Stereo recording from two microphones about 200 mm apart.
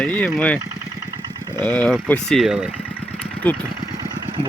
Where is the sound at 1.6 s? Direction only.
5° left (ahead or behind).